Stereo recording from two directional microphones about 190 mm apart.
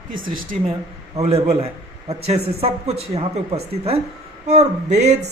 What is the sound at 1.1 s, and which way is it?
Speech, 30° right (ahead or behind).